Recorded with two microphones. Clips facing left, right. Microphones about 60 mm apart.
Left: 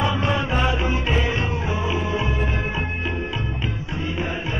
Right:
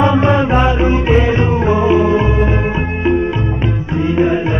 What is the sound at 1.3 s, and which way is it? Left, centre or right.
Music, right.